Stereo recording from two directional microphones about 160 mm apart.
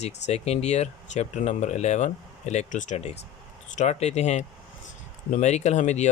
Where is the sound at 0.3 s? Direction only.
40° left (ahead or behind).